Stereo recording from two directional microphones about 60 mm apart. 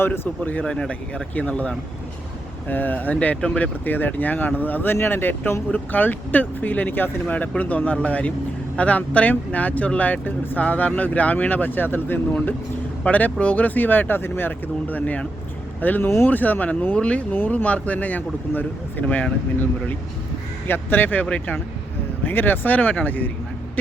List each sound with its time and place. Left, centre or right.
0.0 s speech: left
0.6 s speech: centre
1.4 s speech: left
3.8 s speech: left
20.7 s speech: left
22.2 s speech: left